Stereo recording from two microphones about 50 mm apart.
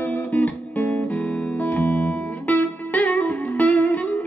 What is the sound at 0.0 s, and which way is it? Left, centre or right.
Music, left.